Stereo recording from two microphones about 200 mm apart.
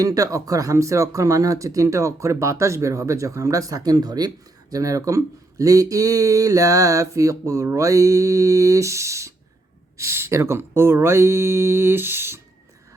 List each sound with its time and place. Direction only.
0.0 s speech: 15° right (ahead or behind)